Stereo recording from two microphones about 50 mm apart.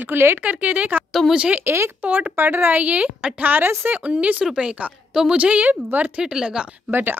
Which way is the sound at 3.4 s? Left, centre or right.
Right.